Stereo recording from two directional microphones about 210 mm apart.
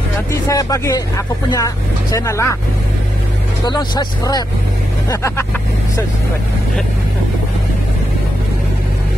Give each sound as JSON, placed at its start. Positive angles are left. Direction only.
{"t": 0.5, "sound": "speech", "side_deg": 15}
{"t": 3.6, "sound": "speech", "side_deg": 20}